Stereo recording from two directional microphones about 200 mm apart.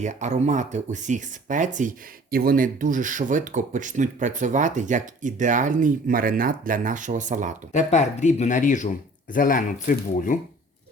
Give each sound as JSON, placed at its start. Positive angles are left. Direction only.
{"t": 0.0, "sound": "speech", "side_deg": -35}
{"t": 7.7, "sound": "speech", "side_deg": 35}